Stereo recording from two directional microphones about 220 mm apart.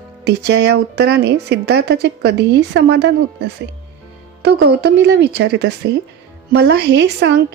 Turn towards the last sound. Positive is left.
turn(degrees=-50)  # may be behind; listen again after turning